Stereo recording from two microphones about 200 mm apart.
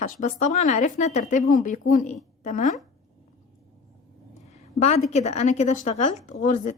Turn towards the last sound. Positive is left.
turn(degrees=40)  # may be behind; listen again after turning